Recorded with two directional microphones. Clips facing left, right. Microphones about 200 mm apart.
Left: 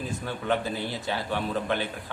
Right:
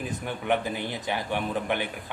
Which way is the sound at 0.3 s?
15° right (ahead or behind).